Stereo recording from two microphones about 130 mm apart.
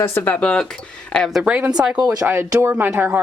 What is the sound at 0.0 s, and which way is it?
Speech, 15° left (ahead or behind).